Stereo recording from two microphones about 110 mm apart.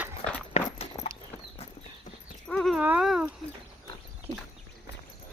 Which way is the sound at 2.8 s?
15° right (ahead or behind).